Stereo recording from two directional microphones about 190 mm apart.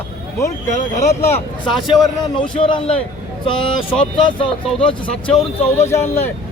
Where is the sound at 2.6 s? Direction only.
30° left (ahead or behind).